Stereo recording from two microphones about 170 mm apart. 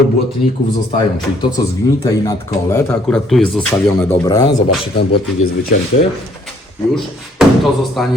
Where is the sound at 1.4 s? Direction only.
25° left (ahead or behind).